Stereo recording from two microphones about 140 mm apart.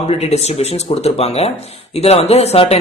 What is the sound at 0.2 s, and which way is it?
Speech, 50° left (ahead or behind).